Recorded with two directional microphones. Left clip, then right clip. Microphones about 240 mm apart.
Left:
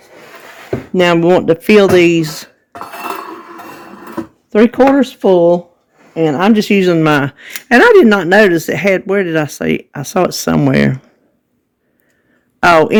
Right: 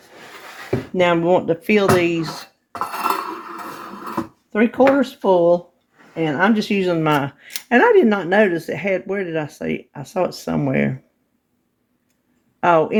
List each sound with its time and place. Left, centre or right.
0.9 s speech: left
2.7 s a sound: centre
4.5 s speech: left
12.5 s a man's voice: left